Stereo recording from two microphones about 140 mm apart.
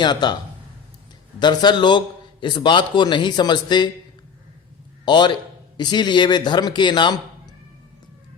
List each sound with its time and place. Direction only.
0.0 s a man's voice: 30° left (ahead or behind)
1.4 s a man's voice: 30° left (ahead or behind)
5.0 s a man's voice: 30° left (ahead or behind)